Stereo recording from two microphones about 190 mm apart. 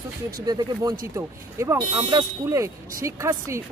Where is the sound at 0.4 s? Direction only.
20° right (ahead or behind).